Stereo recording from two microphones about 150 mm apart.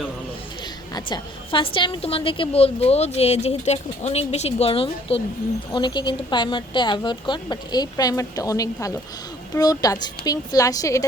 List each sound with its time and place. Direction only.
0.9 s a woman's voice: 30° left (ahead or behind)